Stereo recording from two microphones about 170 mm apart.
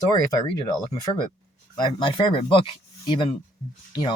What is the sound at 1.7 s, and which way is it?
Speech, 25° left (ahead or behind).